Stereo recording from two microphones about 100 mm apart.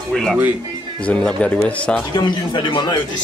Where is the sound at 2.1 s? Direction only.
50° left (ahead or behind).